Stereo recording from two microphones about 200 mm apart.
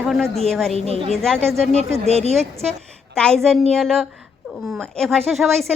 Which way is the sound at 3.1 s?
5° left (ahead or behind).